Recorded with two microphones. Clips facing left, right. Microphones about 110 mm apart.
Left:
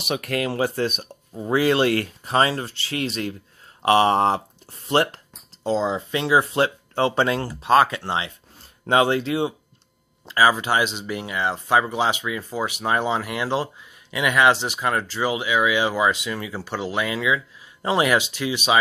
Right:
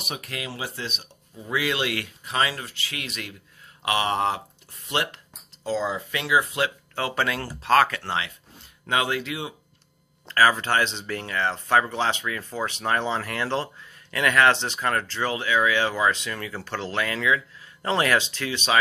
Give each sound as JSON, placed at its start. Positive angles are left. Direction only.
{"t": 0.0, "sound": "speech", "side_deg": 70}
{"t": 4.8, "sound": "a sound", "side_deg": 35}
{"t": 5.7, "sound": "speech", "side_deg": 25}
{"t": 10.2, "sound": "speech", "side_deg": 15}